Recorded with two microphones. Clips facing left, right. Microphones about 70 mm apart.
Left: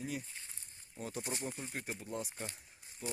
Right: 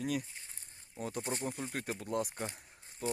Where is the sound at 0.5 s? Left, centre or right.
Right.